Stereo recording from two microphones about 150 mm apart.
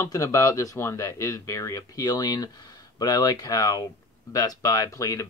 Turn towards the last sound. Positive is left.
turn(degrees=20)  # may be behind; listen again after turning